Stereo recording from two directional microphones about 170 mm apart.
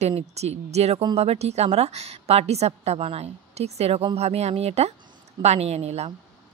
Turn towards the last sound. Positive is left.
turn(degrees=-40)  # may be behind; listen again after turning